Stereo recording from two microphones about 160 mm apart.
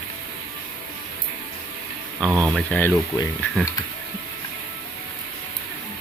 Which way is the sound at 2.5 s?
10° left (ahead or behind).